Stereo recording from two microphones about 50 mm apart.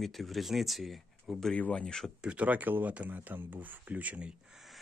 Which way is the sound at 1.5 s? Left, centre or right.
Left.